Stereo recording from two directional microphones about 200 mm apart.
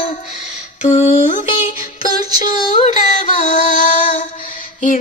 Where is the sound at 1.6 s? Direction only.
40° left (ahead or behind).